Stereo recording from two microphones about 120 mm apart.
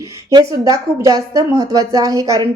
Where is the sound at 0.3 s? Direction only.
30° right (ahead or behind).